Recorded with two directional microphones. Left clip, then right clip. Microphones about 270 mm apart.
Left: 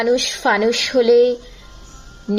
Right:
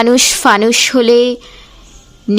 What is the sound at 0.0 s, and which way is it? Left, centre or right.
A woman's voice, right.